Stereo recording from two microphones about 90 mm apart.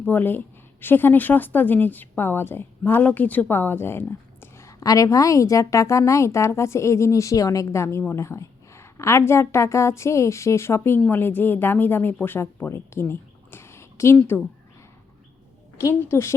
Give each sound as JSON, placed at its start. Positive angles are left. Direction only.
{"t": 0.0, "sound": "a woman's voice", "side_deg": 20}
{"t": 14.2, "sound": "a woman's voice", "side_deg": 20}
{"t": 15.8, "sound": "a woman's voice", "side_deg": 30}